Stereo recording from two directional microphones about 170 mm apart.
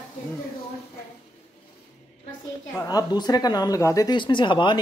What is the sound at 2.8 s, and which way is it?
Speech, 20° left (ahead or behind).